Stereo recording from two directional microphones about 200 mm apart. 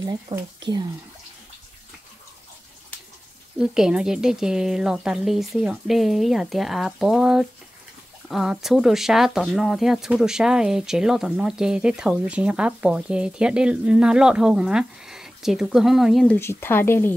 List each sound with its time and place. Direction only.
0.0 s speech: 20° right (ahead or behind)
3.5 s speech: 5° right (ahead or behind)
16.3 s speech: 10° left (ahead or behind)